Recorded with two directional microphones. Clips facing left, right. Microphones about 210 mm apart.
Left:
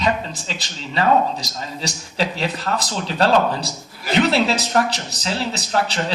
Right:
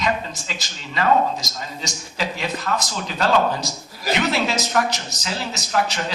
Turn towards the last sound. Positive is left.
turn(degrees=30)  # may be behind; listen again after turning